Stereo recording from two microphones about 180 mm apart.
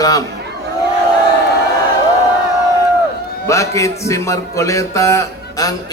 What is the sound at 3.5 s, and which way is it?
Music, 15° left (ahead or behind).